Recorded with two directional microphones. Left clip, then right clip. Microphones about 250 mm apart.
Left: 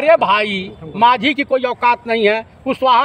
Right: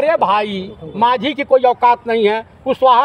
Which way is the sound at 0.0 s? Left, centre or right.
Centre.